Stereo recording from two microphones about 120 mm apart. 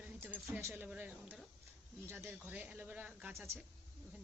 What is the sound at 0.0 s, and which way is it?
Speech, 15° right (ahead or behind).